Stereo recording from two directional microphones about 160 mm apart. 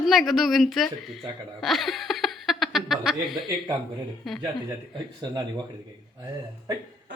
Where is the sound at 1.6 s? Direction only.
Centre (ahead or behind).